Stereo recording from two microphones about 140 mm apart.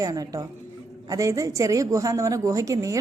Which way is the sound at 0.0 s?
25° right (ahead or behind).